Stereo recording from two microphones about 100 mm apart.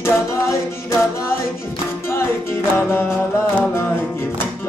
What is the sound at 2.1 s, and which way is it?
Music, 25° left (ahead or behind).